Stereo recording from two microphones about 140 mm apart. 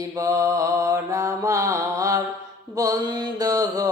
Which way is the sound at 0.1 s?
25° right (ahead or behind).